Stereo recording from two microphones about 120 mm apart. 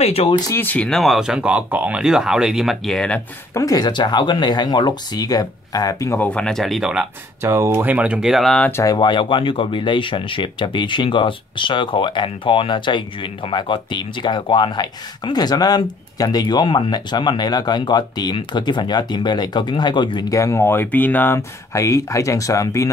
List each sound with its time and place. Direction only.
0.0 s speech: 55° left (ahead or behind)
0.5 s speech: 15° left (ahead or behind)
0.8 s speech: centre (ahead or behind)
3.5 s speech: 30° left (ahead or behind)
6.2 s speech: 10° left (ahead or behind)
7.4 s speech: 25° right (ahead or behind); by 8.6 s centre (ahead or behind)
8.8 s speech: 40° left (ahead or behind)
20.2 s speech: 25° left (ahead or behind)